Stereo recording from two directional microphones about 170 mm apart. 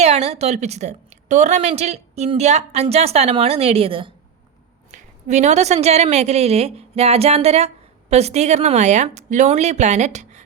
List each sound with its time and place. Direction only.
0.0 s a woman's voice: 40° right (ahead or behind)
4.9 s a woman's voice: 45° right (ahead or behind)